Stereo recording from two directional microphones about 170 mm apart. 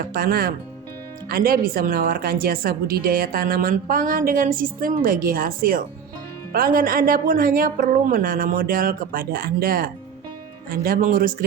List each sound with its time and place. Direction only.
0.1 s speech: 60° right (ahead or behind)